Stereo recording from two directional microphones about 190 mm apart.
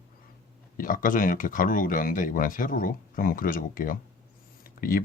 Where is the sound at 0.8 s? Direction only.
45° left (ahead or behind).